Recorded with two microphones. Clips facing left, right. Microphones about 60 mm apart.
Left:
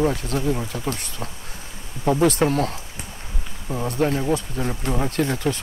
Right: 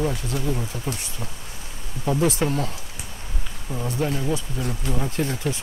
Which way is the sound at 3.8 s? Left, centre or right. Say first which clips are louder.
Left 4 dB; left.